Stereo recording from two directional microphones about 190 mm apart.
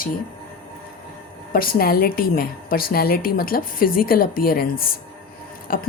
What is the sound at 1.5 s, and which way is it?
Speech, 50° left (ahead or behind).